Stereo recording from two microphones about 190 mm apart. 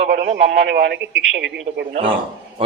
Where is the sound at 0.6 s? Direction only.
65° right (ahead or behind).